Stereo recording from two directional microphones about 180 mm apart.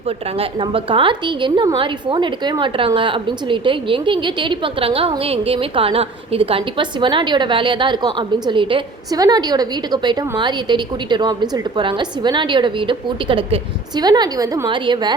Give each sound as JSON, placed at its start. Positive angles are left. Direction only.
{"t": 0.3, "sound": "a woman's voice", "side_deg": -30}